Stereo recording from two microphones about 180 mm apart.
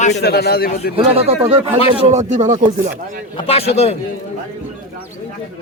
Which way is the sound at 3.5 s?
35° left (ahead or behind).